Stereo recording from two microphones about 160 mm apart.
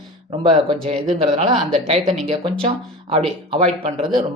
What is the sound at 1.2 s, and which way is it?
Speech, 40° right (ahead or behind).